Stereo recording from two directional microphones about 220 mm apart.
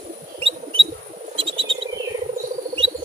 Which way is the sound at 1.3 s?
25° right (ahead or behind).